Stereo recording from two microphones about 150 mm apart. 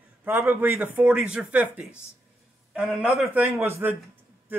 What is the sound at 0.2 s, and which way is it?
A man's voice, 15° right (ahead or behind).